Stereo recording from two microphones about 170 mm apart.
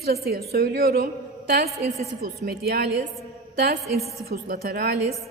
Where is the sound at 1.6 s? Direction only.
40° right (ahead or behind).